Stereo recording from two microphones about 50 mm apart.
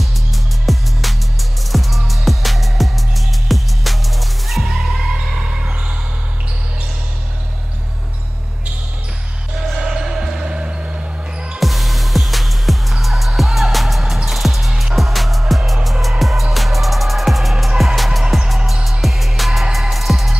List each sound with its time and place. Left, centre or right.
0.7 s music: centre
5.1 s music: right
9.7 s basketball bounce: centre
10.4 s music: centre
11.6 s music: centre